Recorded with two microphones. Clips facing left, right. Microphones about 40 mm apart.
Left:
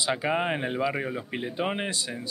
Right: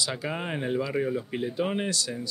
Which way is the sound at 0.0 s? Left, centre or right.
Left.